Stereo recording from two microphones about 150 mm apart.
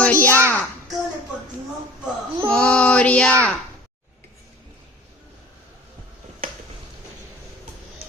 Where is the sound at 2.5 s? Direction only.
10° left (ahead or behind).